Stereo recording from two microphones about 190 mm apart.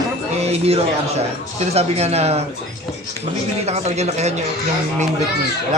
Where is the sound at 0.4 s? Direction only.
35° right (ahead or behind).